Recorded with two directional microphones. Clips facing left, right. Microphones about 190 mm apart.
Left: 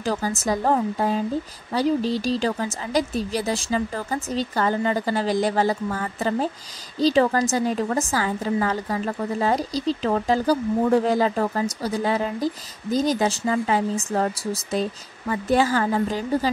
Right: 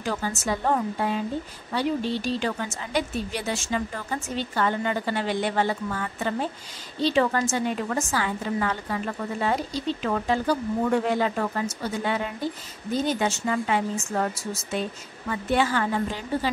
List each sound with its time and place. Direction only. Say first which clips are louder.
0.0 s a woman's voice: left 4 dB; 35° left (ahead or behind)